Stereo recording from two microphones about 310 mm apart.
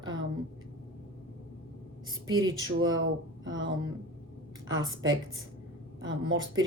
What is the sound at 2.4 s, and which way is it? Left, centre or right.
Speech, right.